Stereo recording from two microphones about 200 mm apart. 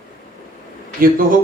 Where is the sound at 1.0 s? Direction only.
45° right (ahead or behind).